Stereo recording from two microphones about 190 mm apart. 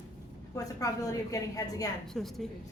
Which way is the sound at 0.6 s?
20° left (ahead or behind).